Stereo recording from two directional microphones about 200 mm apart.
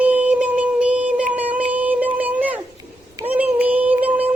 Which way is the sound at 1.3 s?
5° right (ahead or behind).